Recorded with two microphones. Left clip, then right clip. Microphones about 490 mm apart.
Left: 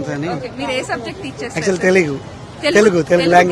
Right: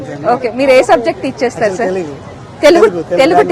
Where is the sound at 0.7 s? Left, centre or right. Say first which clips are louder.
Right 14 dB; right.